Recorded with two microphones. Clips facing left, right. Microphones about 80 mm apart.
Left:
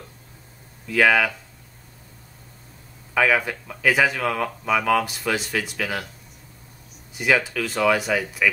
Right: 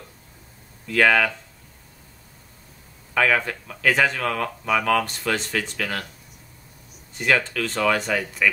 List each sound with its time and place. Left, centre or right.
0.8 s speech: centre
3.2 s speech: centre
7.2 s speech: centre